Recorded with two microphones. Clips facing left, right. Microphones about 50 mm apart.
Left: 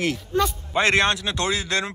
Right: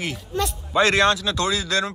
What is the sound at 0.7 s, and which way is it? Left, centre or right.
Speech, left.